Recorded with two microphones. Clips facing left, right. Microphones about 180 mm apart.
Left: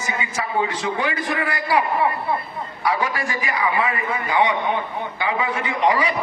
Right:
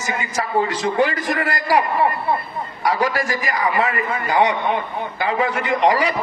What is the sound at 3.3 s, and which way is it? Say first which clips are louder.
Speech: right 2 dB; 90° right.